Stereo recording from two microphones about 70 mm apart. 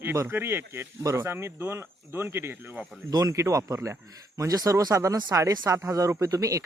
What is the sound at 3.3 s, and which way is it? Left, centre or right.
Speech, right.